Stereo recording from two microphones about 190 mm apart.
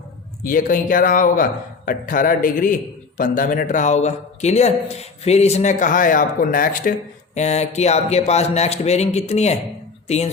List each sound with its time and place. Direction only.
0.4 s a man's voice: 45° left (ahead or behind)